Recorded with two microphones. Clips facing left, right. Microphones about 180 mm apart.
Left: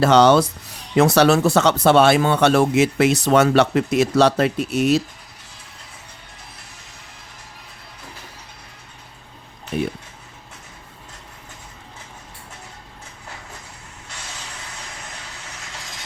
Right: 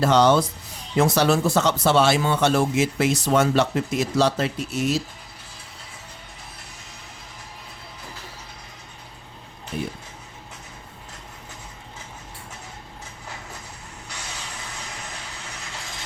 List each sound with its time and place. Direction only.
0.0 s speech: 75° left (ahead or behind)
9.7 s speech: 65° left (ahead or behind)